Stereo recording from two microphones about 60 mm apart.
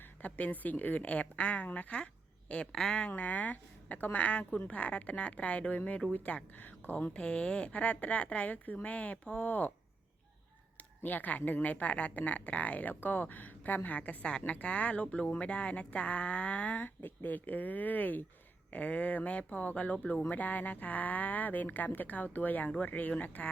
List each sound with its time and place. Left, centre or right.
0.2 s speech: left
2.7 s speech: centre
3.0 s speech: left
11.0 s speech: left